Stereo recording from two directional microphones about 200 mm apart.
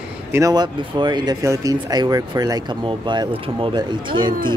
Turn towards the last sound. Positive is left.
turn(degrees=-25)  # may be behind; listen again after turning